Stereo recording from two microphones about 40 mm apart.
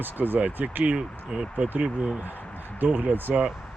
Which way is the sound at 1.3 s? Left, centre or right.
Right.